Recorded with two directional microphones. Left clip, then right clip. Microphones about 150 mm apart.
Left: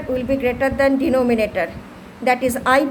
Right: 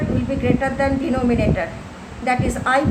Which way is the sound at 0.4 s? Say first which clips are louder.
Left 2 dB; 70° left (ahead or behind).